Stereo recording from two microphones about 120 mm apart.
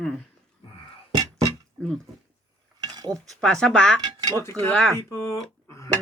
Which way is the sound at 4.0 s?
35° right (ahead or behind).